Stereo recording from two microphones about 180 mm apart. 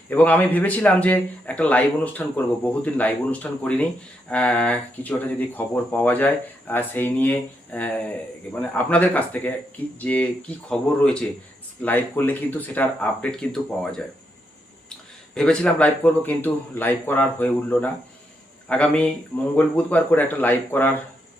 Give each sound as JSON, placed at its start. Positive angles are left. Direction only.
{"t": 0.1, "sound": "speech", "side_deg": 10}
{"t": 15.4, "sound": "speech", "side_deg": 5}